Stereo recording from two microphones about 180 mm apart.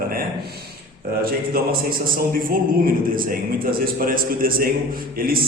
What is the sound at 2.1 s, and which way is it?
A man's voice, 50° right (ahead or behind).